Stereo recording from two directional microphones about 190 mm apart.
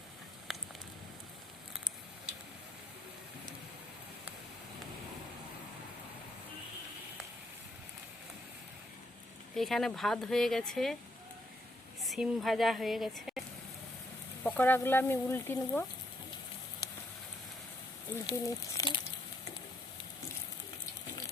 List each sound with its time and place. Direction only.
0.5 s a sound: centre (ahead or behind)
9.6 s speech: centre (ahead or behind)
12.0 s speech: centre (ahead or behind)
14.4 s speech: 10° left (ahead or behind)
16.8 s fire: 20° left (ahead or behind)
18.3 s speech: 20° left (ahead or behind)